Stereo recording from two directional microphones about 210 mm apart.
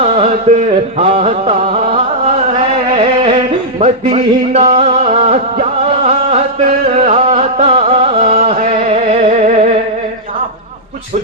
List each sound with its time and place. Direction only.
0.0 s music: 30° right (ahead or behind)